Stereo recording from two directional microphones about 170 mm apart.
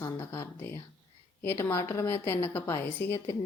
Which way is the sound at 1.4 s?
15° left (ahead or behind).